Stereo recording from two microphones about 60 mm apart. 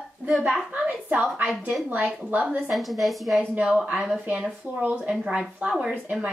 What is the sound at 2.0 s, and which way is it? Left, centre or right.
Speech, right.